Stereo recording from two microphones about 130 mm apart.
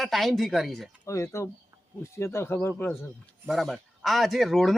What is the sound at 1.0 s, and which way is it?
Speech, 20° left (ahead or behind).